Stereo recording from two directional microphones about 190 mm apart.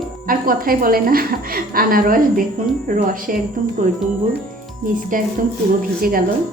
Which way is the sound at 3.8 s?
45° right (ahead or behind).